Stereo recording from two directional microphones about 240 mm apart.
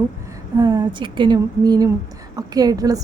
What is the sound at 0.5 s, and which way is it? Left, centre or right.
A woman's voice, centre.